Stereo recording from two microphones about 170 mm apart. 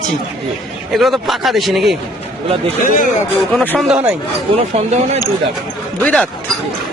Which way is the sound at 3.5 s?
5° left (ahead or behind).